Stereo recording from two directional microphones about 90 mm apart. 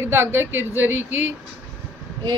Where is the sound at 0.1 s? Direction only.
25° right (ahead or behind).